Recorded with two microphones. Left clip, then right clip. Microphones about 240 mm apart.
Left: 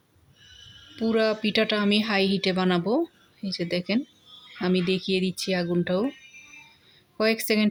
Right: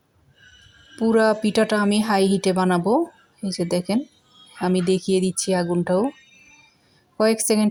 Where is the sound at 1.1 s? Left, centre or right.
Centre.